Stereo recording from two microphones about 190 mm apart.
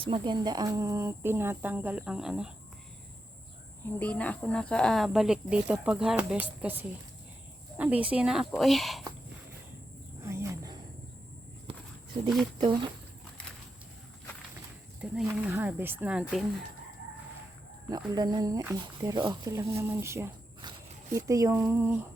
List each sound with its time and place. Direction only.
0.0 s speech: 25° right (ahead or behind); by 2.5 s 5° right (ahead or behind)
3.9 s speech: 5° left (ahead or behind)
10.2 s cricket: 15° right (ahead or behind)
12.5 s speech: 25° right (ahead or behind)
15.0 s speech: 5° right (ahead or behind)
17.8 s speech: 20° right (ahead or behind)